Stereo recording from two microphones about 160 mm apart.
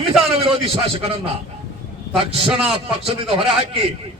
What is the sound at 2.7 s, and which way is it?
A man's voice, 35° right (ahead or behind).